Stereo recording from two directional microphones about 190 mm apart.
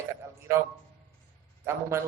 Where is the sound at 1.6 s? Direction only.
15° right (ahead or behind).